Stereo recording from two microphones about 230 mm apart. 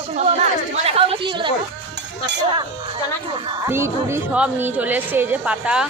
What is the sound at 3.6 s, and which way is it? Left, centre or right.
A woman's voice, centre.